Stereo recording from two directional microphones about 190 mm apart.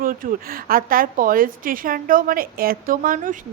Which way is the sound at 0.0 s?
50° right (ahead or behind).